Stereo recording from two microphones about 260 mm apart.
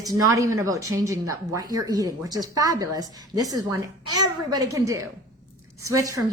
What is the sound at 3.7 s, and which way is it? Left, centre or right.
Speech, right.